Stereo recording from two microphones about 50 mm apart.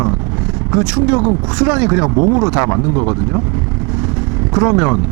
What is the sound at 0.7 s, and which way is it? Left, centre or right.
Speech, centre.